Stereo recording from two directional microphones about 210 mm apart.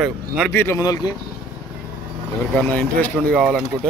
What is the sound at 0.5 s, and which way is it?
Speech, 15° left (ahead or behind).